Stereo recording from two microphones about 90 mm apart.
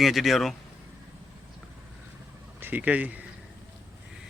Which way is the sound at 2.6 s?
20° right (ahead or behind).